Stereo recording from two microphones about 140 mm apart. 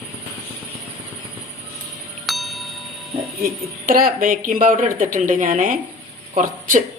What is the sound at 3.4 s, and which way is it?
Speech, 90° right.